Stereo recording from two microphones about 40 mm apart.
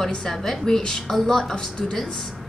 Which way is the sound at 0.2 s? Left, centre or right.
Centre.